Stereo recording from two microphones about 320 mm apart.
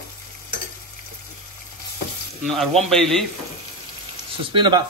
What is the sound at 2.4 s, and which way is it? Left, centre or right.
Speech, centre.